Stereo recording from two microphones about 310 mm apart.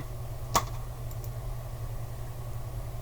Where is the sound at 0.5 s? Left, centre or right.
Centre.